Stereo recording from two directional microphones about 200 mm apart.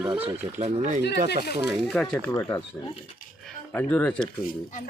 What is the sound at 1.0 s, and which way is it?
Speech, 55° left (ahead or behind).